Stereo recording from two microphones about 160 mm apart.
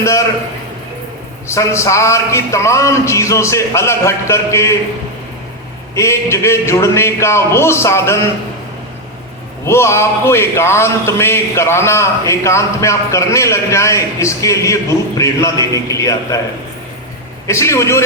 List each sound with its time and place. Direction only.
0.0 s a man's voice: 20° left (ahead or behind)
1.5 s a man's voice: 20° left (ahead or behind)
5.9 s a man's voice: 20° left (ahead or behind)
9.6 s a man's voice: 15° left (ahead or behind)
17.4 s a man's voice: 20° left (ahead or behind)